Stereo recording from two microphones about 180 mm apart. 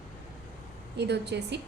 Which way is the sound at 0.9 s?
70° right (ahead or behind).